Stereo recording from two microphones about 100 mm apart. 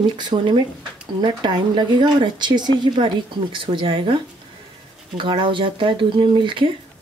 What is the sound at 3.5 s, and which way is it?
Speech, 60° right (ahead or behind).